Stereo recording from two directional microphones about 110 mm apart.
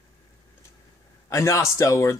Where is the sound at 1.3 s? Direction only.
25° left (ahead or behind).